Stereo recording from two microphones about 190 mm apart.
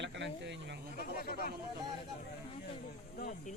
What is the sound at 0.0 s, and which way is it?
Snake, 65° right (ahead or behind).